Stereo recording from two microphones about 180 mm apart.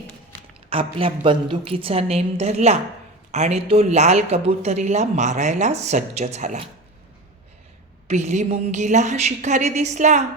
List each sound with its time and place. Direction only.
0.7 s speech: 30° right (ahead or behind)
8.0 s speech: 40° right (ahead or behind)